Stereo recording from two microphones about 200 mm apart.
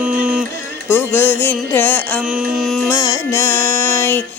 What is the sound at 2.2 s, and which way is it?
Music, 5° right (ahead or behind).